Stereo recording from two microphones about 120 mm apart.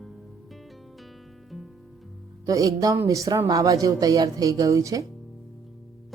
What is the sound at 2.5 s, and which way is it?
Speech, 30° right (ahead or behind).